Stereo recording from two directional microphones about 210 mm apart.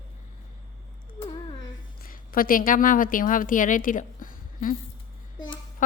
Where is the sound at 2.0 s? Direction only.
45° left (ahead or behind).